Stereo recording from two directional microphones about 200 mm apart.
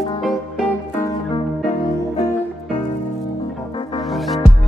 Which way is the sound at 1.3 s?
30° left (ahead or behind).